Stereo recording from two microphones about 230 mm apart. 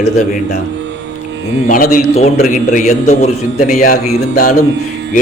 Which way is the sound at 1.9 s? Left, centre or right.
Left.